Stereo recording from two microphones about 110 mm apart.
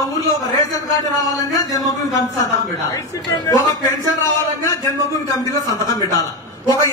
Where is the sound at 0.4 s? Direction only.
35° left (ahead or behind).